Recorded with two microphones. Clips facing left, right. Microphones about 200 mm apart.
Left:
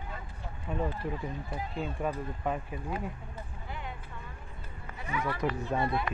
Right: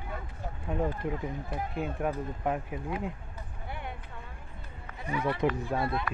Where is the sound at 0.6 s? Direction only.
15° right (ahead or behind).